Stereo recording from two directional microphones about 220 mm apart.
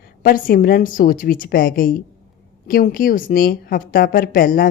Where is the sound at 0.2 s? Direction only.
40° left (ahead or behind).